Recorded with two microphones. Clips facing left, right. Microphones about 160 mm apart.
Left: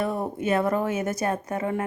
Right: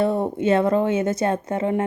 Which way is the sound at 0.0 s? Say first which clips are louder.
Right 6 dB; 25° right (ahead or behind).